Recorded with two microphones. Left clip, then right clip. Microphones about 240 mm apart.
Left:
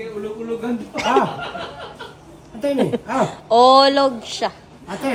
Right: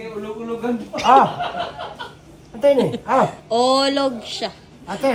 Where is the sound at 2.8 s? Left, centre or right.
Centre.